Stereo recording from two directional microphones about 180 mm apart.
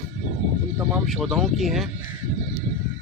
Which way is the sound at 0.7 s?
10° right (ahead or behind).